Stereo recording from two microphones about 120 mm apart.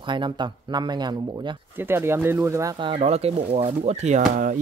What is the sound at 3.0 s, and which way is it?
Speech, 60° right (ahead or behind).